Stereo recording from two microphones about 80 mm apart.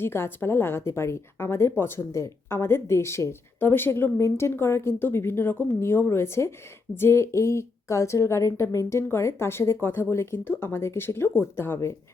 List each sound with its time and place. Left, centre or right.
0.0 s a woman's voice: left